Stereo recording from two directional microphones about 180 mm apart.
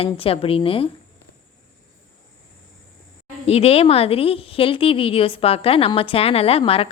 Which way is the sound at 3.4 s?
35° left (ahead or behind).